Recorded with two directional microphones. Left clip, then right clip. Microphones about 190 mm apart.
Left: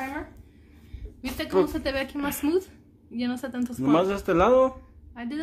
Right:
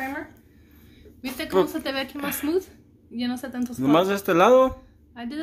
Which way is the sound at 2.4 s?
25° left (ahead or behind).